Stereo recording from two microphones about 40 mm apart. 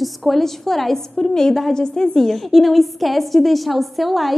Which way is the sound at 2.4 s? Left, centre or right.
Centre.